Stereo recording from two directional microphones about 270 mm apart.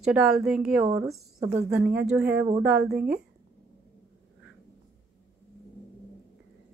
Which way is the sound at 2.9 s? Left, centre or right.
Right.